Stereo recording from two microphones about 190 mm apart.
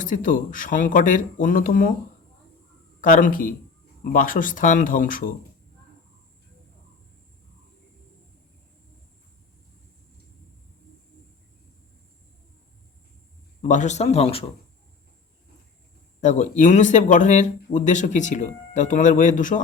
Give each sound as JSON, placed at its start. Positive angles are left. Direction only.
{"t": 0.0, "sound": "speech", "side_deg": 45}
{"t": 3.0, "sound": "speech", "side_deg": 45}
{"t": 13.6, "sound": "speech", "side_deg": 40}
{"t": 16.2, "sound": "speech", "side_deg": 40}